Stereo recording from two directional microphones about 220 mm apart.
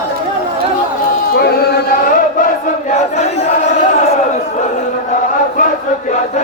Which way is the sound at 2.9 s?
30° left (ahead or behind).